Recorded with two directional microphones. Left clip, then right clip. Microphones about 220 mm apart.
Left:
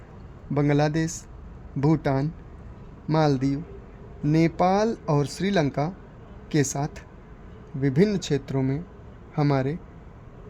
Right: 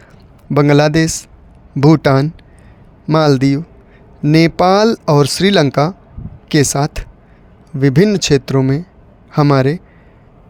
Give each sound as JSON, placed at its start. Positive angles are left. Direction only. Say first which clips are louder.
{"t": 0.5, "sound": "speech", "louder": "right 13 dB", "side_deg": -45}